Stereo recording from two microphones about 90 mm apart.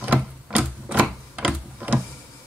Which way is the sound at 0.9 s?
15° right (ahead or behind).